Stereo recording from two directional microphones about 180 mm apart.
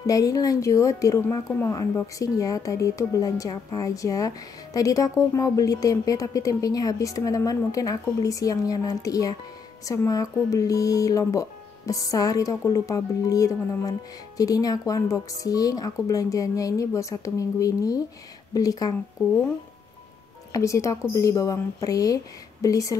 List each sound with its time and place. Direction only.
0.0 s speech: 20° left (ahead or behind)
19.2 s speech: centre (ahead or behind)
20.5 s speech: 15° left (ahead or behind)